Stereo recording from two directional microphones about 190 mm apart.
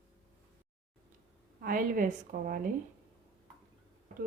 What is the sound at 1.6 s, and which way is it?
A woman's voice, 45° right (ahead or behind).